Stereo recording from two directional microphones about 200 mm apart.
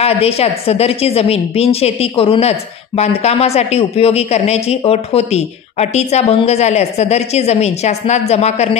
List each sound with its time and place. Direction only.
0.0 s a man's voice: 30° left (ahead or behind)